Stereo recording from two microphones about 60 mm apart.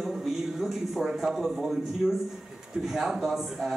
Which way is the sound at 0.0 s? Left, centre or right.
Centre.